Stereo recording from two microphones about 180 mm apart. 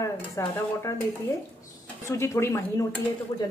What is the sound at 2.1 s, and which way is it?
Dishes, 15° left (ahead or behind).